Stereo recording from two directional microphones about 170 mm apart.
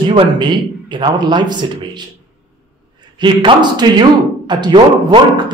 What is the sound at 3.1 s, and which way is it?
Speech, 25° right (ahead or behind).